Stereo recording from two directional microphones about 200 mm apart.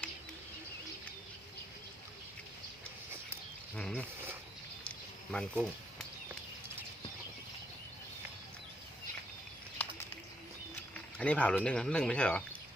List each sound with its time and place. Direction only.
3.8 s speech: 5° left (ahead or behind)
5.3 s speech: 5° left (ahead or behind)
10.9 s speech: 5° left (ahead or behind)